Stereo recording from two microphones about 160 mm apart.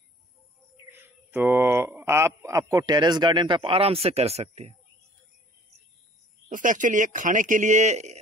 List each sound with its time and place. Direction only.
0.9 s speech: 10° right (ahead or behind); by 4.7 s 40° right (ahead or behind)
6.5 s a man's voice: 55° right (ahead or behind)